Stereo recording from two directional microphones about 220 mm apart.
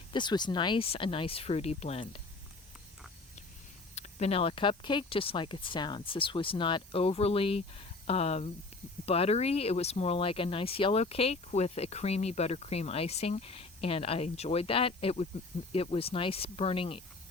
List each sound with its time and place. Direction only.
0.1 s speech: 20° left (ahead or behind)
3.9 s speech: 30° left (ahead or behind)